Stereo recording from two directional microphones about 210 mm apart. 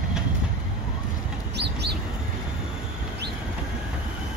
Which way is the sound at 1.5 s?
55° right (ahead or behind).